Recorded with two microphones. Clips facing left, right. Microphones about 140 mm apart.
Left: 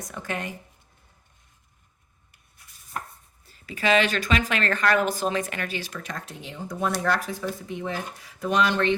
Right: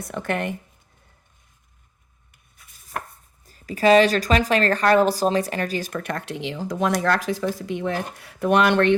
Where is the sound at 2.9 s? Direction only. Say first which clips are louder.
Right 3 dB; 85° right.